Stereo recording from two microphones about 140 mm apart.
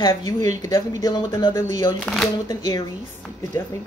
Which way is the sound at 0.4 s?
55° right (ahead or behind).